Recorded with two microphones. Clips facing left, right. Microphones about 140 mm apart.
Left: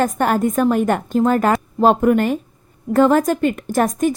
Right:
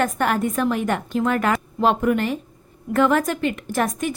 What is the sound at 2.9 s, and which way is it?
A woman's voice, 35° left (ahead or behind).